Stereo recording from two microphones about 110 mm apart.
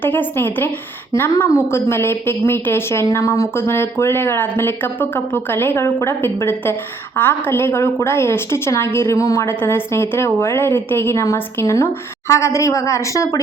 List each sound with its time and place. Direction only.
0.0 s speech: 20° left (ahead or behind)